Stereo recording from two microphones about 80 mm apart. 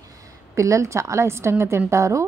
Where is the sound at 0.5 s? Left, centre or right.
Right.